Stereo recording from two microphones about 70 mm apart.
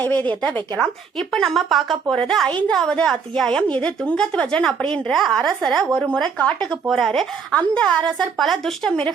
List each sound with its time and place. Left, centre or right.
0.0 s speech: left
0.8 s a woman's voice: centre
3.6 s a woman's voice: centre
6.8 s a woman's voice: centre
7.1 s a woman's voice: centre